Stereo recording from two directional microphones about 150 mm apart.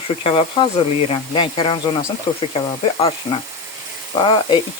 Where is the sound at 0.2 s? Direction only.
40° left (ahead or behind).